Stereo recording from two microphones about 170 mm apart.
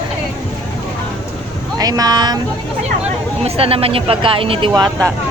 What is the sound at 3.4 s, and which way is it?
Speech, 35° right (ahead or behind).